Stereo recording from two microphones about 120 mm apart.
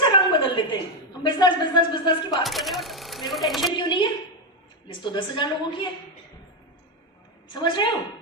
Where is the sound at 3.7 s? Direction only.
40° left (ahead or behind).